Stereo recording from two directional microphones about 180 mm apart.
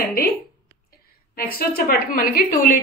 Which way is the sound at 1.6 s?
55° left (ahead or behind).